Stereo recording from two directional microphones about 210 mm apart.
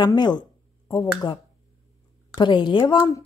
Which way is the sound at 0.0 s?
20° left (ahead or behind).